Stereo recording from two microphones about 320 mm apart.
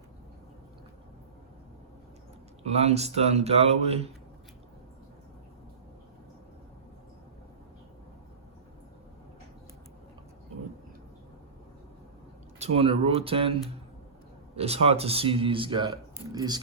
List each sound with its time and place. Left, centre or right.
2.6 s speech: centre
12.5 s speech: centre